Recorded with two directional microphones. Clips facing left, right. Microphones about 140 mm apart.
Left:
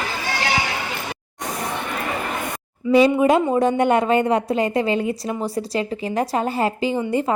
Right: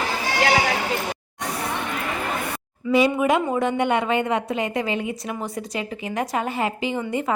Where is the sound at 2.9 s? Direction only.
35° left (ahead or behind).